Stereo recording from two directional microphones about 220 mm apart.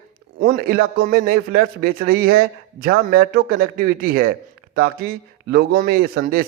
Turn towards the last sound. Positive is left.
turn(degrees=-45)  # may be behind; listen again after turning